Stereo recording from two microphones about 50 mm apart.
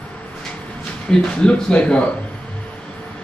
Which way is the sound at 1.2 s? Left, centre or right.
Centre.